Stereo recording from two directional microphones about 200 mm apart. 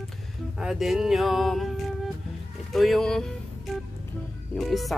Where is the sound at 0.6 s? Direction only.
Centre (ahead or behind).